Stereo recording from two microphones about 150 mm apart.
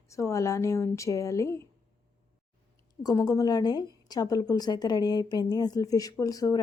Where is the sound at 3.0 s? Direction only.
25° left (ahead or behind).